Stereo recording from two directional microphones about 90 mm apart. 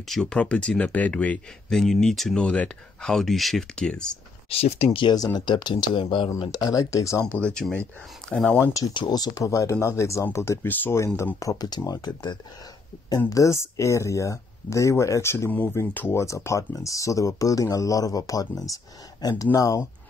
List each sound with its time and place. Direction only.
0.1 s speech: 10° left (ahead or behind)
4.5 s speech: 85° left
5.1 s speech: 50° left (ahead or behind)
6.5 s speech: 40° left (ahead or behind)
7.3 s speech: 10° left (ahead or behind)
8.9 s speech: 50° left (ahead or behind); by 11.0 s 25° left (ahead or behind)
11.3 s speech: 40° left (ahead or behind)
13.3 s speech: 35° left (ahead or behind)